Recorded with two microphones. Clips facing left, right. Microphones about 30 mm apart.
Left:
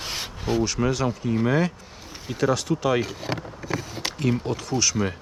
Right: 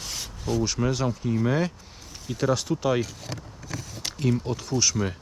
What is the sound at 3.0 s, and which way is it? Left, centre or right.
Speech, left.